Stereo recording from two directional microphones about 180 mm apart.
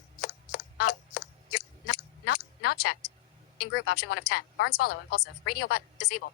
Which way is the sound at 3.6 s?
60° left (ahead or behind).